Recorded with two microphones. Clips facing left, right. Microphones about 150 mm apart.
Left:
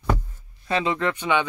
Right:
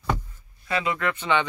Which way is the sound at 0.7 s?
25° left (ahead or behind).